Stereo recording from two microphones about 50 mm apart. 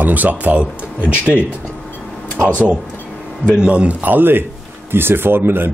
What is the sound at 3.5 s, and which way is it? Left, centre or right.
Speech, right.